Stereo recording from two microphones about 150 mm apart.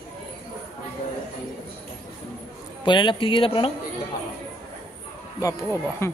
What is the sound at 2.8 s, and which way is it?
Speech, 30° left (ahead or behind).